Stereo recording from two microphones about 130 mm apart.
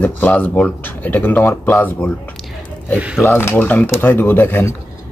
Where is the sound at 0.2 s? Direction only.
15° left (ahead or behind).